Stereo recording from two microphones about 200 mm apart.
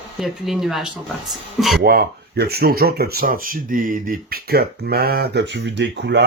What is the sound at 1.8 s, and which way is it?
Speech, 50° right (ahead or behind).